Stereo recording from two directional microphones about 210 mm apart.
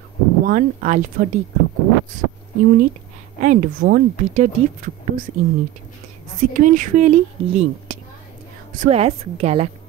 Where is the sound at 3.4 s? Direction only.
35° right (ahead or behind).